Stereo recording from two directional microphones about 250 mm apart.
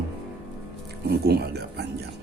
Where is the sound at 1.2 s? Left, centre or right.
Right.